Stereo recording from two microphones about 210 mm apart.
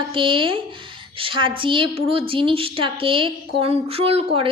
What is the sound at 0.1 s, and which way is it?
A woman's voice, 25° right (ahead or behind).